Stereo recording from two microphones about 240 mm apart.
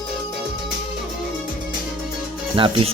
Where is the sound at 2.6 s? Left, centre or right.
Right.